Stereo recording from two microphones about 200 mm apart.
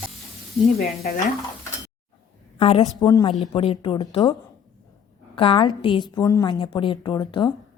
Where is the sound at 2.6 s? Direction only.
30° left (ahead or behind).